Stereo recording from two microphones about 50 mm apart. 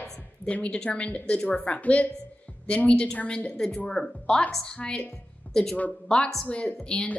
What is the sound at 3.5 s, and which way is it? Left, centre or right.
A woman's voice, centre.